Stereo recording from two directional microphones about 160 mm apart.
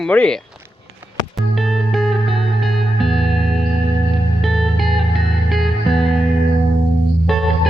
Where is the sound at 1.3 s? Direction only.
Centre (ahead or behind).